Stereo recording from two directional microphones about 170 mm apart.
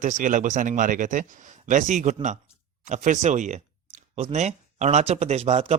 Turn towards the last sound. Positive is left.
turn(degrees=-40)  # may be behind; listen again after turning